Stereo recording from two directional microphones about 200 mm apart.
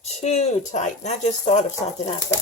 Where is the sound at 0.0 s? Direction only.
35° left (ahead or behind).